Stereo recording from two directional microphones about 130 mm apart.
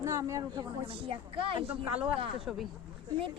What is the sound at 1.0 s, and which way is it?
Speech, 45° right (ahead or behind).